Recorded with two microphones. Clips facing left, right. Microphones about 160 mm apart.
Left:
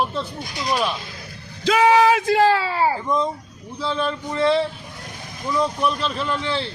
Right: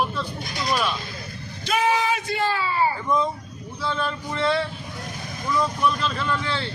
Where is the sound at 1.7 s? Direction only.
90° left.